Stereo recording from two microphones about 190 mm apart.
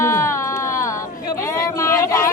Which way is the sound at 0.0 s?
15° left (ahead or behind).